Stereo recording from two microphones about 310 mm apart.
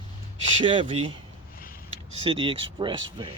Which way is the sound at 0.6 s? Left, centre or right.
Centre.